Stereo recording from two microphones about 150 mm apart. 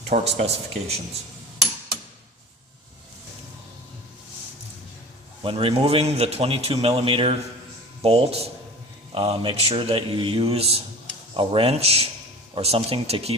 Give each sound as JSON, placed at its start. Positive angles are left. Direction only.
{"t": 0.1, "sound": "speech", "side_deg": -45}
{"t": 5.4, "sound": "a man's voice", "side_deg": -40}